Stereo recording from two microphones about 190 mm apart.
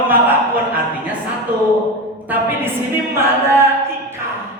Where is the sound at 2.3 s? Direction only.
10° right (ahead or behind).